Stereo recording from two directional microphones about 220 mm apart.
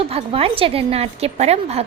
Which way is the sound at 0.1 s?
25° right (ahead or behind).